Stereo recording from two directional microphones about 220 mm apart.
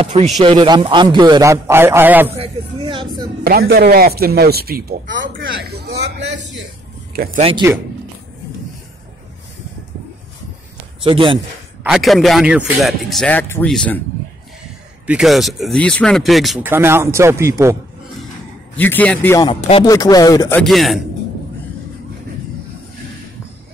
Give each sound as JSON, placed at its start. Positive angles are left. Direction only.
{"t": 0.0, "sound": "a man's voice", "side_deg": -30}
{"t": 2.3, "sound": "speech", "side_deg": -25}
{"t": 3.4, "sound": "speech", "side_deg": -45}
{"t": 7.2, "sound": "speech", "side_deg": -40}
{"t": 11.1, "sound": "a man's voice", "side_deg": -25}
{"t": 11.8, "sound": "speech", "side_deg": 0}
{"t": 15.0, "sound": "speech", "side_deg": 0}
{"t": 18.8, "sound": "speech", "side_deg": 10}